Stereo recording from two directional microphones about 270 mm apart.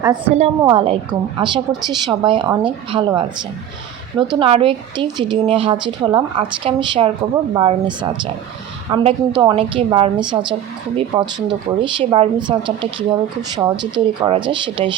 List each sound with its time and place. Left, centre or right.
0.0 s a woman's voice: centre